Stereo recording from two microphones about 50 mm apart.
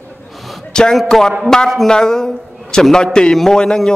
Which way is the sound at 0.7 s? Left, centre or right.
Centre.